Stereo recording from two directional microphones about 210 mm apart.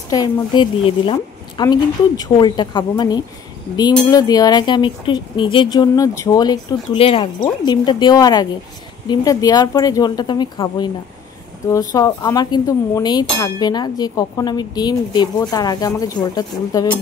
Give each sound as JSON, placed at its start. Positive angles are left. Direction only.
{"t": 0.1, "sound": "a woman's voice", "side_deg": 20}